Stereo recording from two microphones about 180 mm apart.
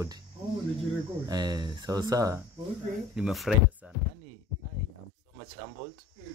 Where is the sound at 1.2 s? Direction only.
20° right (ahead or behind).